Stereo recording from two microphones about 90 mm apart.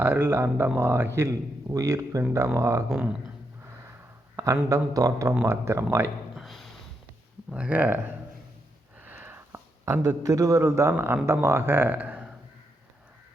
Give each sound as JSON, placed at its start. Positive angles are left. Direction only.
{"t": 0.0, "sound": "speech", "side_deg": -25}
{"t": 2.9, "sound": "speech", "side_deg": -10}
{"t": 4.4, "sound": "speech", "side_deg": -45}
{"t": 6.3, "sound": "a sound", "side_deg": 0}
{"t": 7.5, "sound": "speech", "side_deg": -15}
{"t": 9.0, "sound": "a sound", "side_deg": -20}
{"t": 9.8, "sound": "speech", "side_deg": -35}